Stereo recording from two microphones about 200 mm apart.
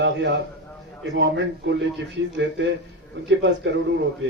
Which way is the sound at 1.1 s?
65° right (ahead or behind).